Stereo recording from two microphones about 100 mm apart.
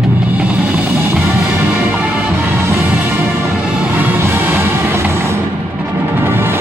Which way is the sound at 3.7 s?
10° right (ahead or behind).